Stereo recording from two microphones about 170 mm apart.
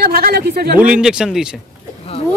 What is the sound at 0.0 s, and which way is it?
Speech, 65° right (ahead or behind).